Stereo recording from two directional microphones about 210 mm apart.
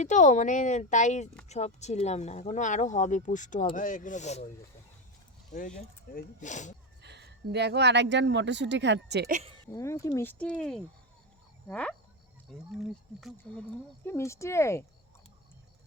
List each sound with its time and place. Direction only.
0.0 s speech: 35° left (ahead or behind)
5.5 s speech: 40° left (ahead or behind)
7.0 s speech: 55° right (ahead or behind)
9.7 s speech: 15° left (ahead or behind)